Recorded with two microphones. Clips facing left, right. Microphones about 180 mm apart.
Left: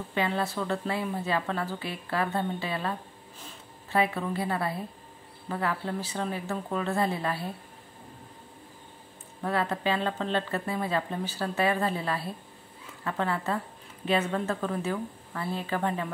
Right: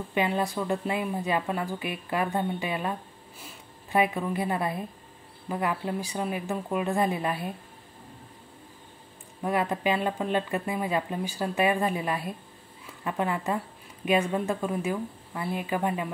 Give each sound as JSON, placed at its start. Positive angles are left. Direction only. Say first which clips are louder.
{"t": 0.1, "sound": "a woman's voice", "louder": "right 2 dB", "side_deg": -15}
{"t": 9.4, "sound": "a woman's voice", "louder": "right 2 dB", "side_deg": -15}